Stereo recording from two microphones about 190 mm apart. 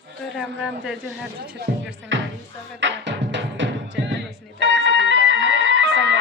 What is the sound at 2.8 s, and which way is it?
Music, 70° right (ahead or behind).